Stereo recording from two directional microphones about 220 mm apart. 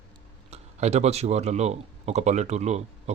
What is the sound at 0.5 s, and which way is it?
Speech, 30° right (ahead or behind).